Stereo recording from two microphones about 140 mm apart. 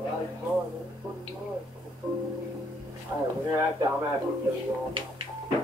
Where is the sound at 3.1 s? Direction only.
15° right (ahead or behind).